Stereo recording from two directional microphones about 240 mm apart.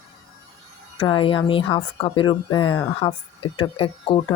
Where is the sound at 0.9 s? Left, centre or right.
Left.